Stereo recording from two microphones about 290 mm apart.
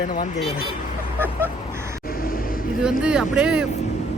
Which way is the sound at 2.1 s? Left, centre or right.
Left.